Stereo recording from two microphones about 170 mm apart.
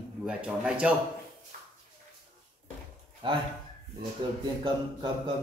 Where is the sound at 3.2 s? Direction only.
30° right (ahead or behind).